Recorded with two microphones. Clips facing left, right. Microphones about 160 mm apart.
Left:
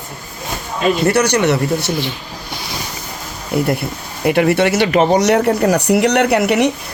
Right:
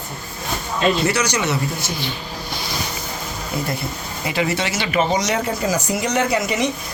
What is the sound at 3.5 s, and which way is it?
Speech, 65° left (ahead or behind).